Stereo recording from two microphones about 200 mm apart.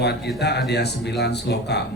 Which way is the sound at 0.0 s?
55° left (ahead or behind).